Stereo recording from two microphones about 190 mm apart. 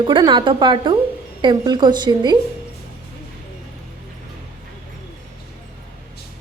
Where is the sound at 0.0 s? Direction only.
25° right (ahead or behind).